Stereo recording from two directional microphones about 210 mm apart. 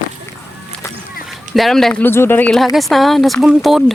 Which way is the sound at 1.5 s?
Centre (ahead or behind).